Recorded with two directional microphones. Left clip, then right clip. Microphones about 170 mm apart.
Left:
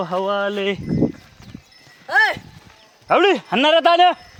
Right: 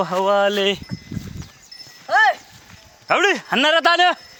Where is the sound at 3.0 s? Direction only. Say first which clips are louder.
Left 2 dB; centre (ahead or behind).